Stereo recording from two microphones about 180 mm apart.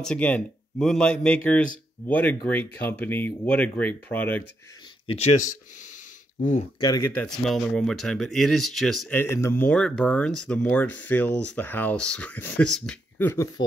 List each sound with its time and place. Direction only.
0.0 s speech: 5° left (ahead or behind)
5.0 s speech: 35° left (ahead or behind)
6.8 s speech: 20° left (ahead or behind)
7.2 s speech: centre (ahead or behind)
9.1 s speech: 15° left (ahead or behind)